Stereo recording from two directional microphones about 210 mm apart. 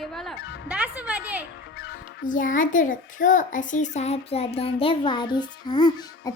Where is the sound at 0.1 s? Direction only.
Centre (ahead or behind).